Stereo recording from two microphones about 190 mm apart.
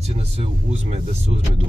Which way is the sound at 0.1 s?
35° right (ahead or behind).